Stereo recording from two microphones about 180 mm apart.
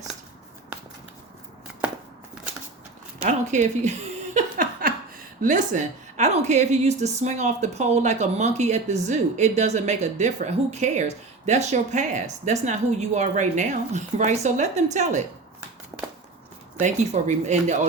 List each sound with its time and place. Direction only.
3.2 s a sound: 40° right (ahead or behind)
5.4 s a woman's voice: 45° right (ahead or behind)
16.8 s a woman's voice: 40° right (ahead or behind)